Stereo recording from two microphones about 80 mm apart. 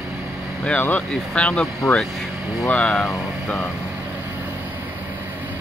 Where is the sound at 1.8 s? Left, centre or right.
Left.